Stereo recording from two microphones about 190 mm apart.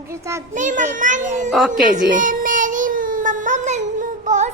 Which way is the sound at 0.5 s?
40° right (ahead or behind).